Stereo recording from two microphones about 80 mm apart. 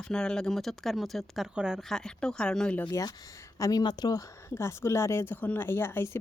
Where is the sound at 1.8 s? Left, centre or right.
Centre.